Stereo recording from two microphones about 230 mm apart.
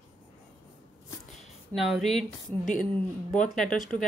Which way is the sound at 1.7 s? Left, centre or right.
Centre.